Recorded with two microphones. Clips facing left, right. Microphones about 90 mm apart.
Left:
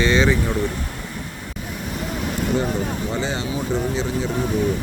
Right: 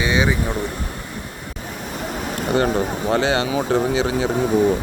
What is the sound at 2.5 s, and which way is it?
Speech, 70° right (ahead or behind).